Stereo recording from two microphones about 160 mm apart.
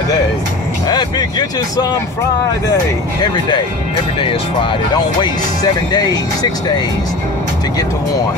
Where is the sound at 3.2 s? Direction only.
25° left (ahead or behind).